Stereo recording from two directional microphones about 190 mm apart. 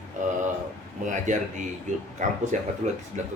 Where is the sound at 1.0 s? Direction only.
40° right (ahead or behind).